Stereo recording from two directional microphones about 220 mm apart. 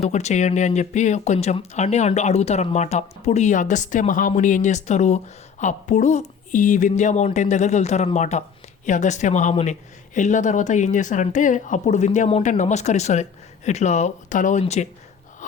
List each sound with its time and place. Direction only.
0.0 s speech: 30° left (ahead or behind)